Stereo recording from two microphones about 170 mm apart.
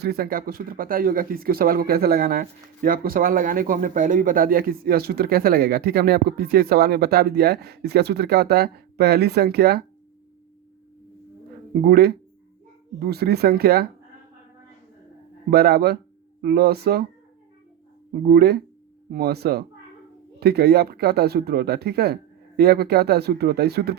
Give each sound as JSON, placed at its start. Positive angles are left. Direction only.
{"t": 0.0, "sound": "speech", "side_deg": -65}
{"t": 11.8, "sound": "speech", "side_deg": -65}
{"t": 15.4, "sound": "speech", "side_deg": -65}
{"t": 18.1, "sound": "speech", "side_deg": -65}